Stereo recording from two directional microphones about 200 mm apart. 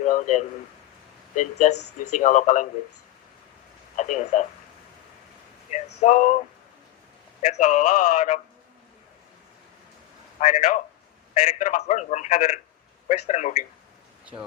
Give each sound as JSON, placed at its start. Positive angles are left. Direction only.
{"t": 0.0, "sound": "a sound", "side_deg": 35}
{"t": 1.4, "sound": "a man's voice", "side_deg": 40}
{"t": 3.9, "sound": "a man's voice", "side_deg": 35}
{"t": 5.7, "sound": "a man's voice", "side_deg": 35}
{"t": 7.5, "sound": "a man's voice", "side_deg": 40}
{"t": 10.4, "sound": "a man's voice", "side_deg": 40}